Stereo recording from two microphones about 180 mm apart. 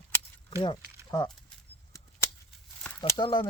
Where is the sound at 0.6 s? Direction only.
25° left (ahead or behind).